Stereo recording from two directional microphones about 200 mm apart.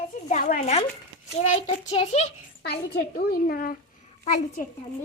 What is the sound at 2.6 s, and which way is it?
A child's voice, 55° left (ahead or behind).